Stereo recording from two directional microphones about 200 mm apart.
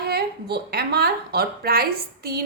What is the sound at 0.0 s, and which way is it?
A woman's voice, 50° right (ahead or behind).